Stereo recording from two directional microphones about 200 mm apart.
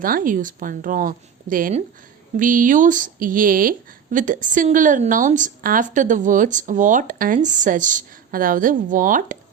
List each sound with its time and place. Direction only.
0.0 s a woman's voice: 45° right (ahead or behind)